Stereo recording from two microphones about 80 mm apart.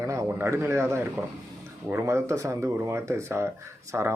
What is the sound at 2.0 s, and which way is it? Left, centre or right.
Speech, right.